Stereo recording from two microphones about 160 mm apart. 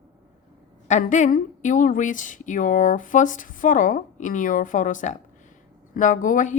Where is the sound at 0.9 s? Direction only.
50° left (ahead or behind).